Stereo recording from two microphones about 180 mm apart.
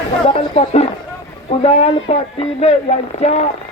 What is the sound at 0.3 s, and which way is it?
Speech, 30° left (ahead or behind).